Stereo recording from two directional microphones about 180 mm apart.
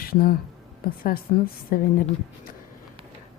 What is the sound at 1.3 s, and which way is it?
Speech, 45° left (ahead or behind).